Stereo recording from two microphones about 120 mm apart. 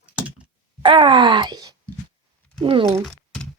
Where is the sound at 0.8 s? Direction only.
45° right (ahead or behind).